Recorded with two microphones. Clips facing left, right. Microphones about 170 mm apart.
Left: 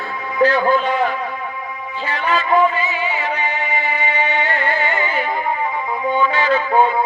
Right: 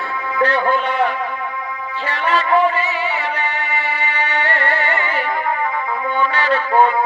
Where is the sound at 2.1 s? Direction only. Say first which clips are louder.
Right 1 dB; 70° right (ahead or behind).